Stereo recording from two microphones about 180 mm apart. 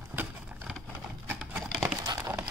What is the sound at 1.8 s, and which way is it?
Crumpling, 15° right (ahead or behind).